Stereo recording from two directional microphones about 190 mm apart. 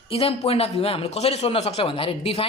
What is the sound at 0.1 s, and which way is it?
Speech, 30° left (ahead or behind).